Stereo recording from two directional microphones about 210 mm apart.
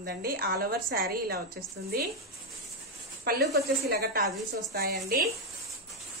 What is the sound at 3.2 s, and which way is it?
A woman's voice, 50° right (ahead or behind).